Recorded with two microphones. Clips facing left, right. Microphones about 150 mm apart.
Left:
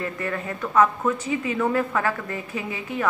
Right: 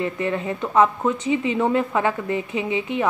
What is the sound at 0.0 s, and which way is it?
A woman's voice, 20° right (ahead or behind).